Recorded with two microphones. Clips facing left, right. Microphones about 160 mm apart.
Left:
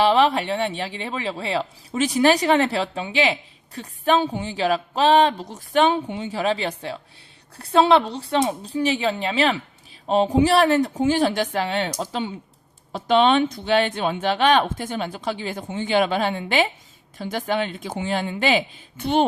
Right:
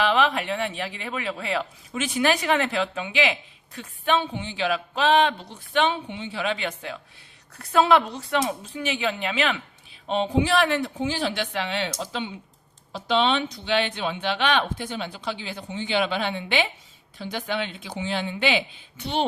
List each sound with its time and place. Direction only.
0.0 s speech: 35° left (ahead or behind); by 19.2 s 50° left (ahead or behind)